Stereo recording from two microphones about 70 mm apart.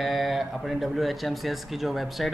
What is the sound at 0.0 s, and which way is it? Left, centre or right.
A man's voice, centre.